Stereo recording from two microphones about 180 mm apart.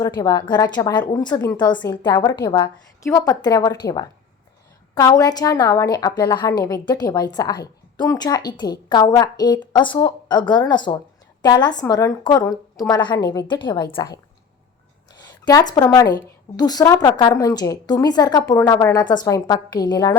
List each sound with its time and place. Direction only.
0.0 s a woman's voice: 20° left (ahead or behind)
15.4 s a woman's voice: 20° left (ahead or behind)